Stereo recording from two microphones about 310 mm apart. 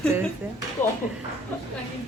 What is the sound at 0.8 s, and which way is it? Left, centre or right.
Speech, centre.